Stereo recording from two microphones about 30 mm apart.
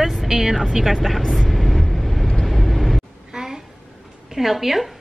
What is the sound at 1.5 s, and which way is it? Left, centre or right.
Vehicle, centre.